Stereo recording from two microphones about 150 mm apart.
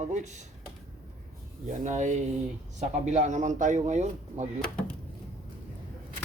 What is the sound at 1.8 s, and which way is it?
Speech, 55° right (ahead or behind).